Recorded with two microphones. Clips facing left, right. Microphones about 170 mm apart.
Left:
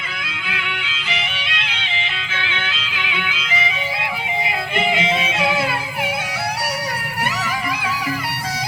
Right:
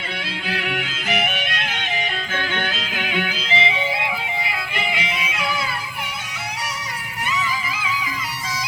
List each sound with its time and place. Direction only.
0.5 s music: 45° right (ahead or behind); by 4.1 s 30° right (ahead or behind)
4.4 s music: 25° left (ahead or behind)
7.3 s music: 70° left (ahead or behind)